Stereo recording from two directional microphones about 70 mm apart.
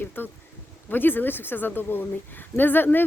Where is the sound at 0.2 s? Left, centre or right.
Left.